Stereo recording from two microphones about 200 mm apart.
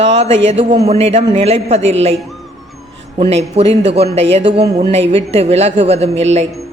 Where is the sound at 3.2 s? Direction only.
30° right (ahead or behind).